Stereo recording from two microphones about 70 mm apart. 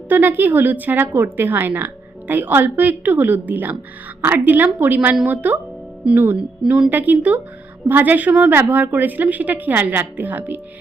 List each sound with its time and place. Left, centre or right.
0.1 s a woman's voice: right
6.3 s speech: centre
6.9 s a woman's voice: right